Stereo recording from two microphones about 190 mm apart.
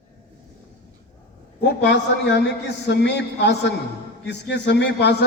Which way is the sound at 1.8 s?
65° left (ahead or behind).